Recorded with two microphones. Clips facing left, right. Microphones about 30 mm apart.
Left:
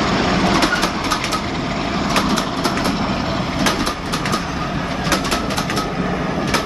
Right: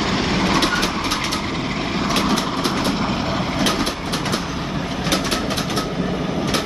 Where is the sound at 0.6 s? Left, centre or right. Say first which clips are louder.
Left 2 dB; centre.